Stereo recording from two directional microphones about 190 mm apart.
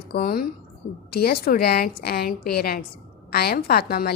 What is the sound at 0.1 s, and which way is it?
A woman's voice, 50° left (ahead or behind).